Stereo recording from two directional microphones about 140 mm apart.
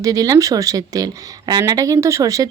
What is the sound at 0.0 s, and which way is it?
A woman's voice, 25° right (ahead or behind).